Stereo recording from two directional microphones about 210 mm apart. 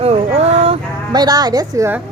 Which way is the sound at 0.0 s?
30° right (ahead or behind).